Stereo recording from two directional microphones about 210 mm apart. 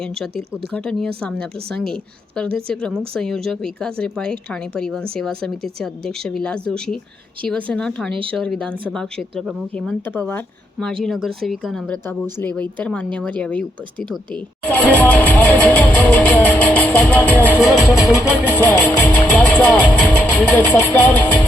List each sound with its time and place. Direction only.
0.0 s speech: centre (ahead or behind)
8.1 s speech: 25° right (ahead or behind)
8.4 s speech: 5° left (ahead or behind)
16.0 s music: 10° left (ahead or behind)